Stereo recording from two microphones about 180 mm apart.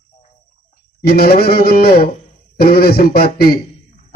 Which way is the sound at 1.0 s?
60° left (ahead or behind).